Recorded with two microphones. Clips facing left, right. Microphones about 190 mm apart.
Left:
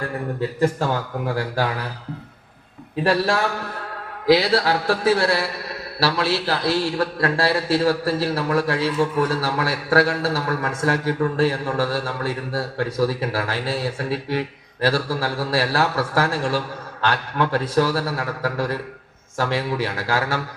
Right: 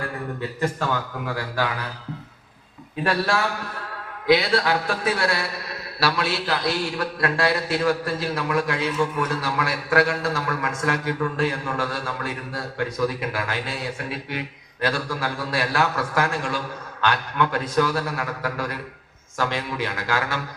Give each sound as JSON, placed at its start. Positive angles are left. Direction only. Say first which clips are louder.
{"t": 3.0, "sound": "a man's voice", "louder": "left 3 dB", "side_deg": 35}